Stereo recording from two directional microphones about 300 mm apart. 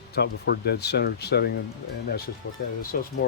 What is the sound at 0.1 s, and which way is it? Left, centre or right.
Speech, left.